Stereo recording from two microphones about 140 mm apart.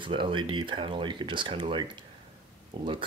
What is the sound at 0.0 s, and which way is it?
Speech, 35° right (ahead or behind).